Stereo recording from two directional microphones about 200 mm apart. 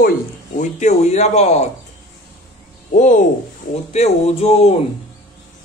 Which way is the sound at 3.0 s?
40° left (ahead or behind).